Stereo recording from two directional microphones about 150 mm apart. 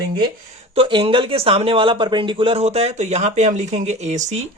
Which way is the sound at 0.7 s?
35° right (ahead or behind).